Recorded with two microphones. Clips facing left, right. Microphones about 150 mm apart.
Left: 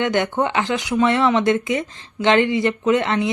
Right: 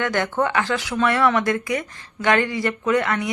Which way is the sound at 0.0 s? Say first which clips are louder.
Left 2 dB; 20° left (ahead or behind).